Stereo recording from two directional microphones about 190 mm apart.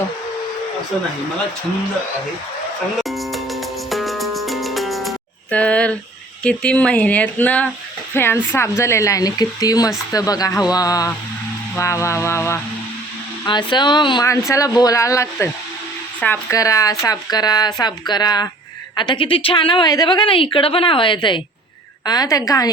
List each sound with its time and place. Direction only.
3.0 s music: centre (ahead or behind)
6.4 s a woman's voice: 5° left (ahead or behind)